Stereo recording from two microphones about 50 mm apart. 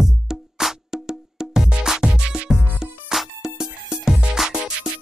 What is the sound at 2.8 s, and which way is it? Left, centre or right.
Music, centre.